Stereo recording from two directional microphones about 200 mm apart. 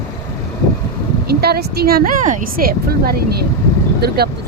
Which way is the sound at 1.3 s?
50° right (ahead or behind).